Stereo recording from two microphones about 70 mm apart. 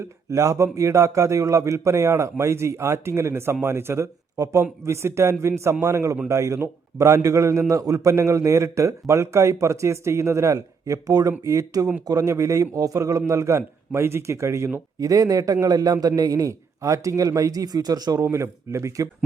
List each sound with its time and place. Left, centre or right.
0.3 s a man's voice: right
13.6 s a man's voice: right
15.0 s a man's voice: right
18.2 s a man's voice: right